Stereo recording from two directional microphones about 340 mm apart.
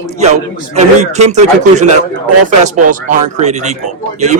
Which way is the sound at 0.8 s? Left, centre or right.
Centre.